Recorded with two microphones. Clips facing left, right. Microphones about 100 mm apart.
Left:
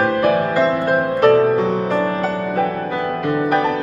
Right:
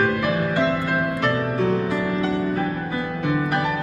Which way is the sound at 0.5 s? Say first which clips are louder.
Left 5 dB; 65° left (ahead or behind).